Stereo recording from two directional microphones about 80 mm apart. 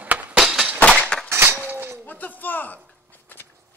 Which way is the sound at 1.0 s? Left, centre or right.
Centre.